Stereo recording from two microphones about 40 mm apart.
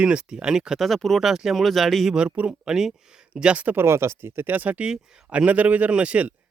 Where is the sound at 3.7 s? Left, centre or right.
Right.